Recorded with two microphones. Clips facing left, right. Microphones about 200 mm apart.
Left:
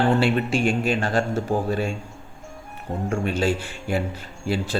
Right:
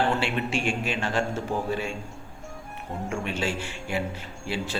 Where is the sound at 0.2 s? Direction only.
40° left (ahead or behind).